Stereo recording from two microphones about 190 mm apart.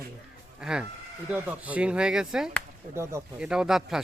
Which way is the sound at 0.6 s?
5° right (ahead or behind).